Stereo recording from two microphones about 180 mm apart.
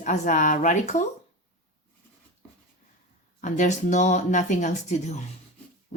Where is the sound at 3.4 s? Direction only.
45° left (ahead or behind).